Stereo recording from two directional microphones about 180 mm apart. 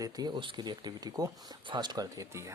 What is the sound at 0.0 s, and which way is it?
Speech, 20° right (ahead or behind).